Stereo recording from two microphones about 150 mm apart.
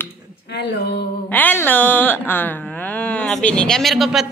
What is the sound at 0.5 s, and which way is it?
Speech, 90° left.